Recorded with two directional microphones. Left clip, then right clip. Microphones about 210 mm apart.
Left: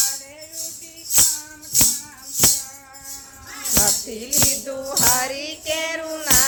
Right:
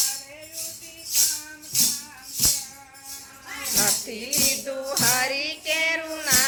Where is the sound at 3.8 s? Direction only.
15° left (ahead or behind).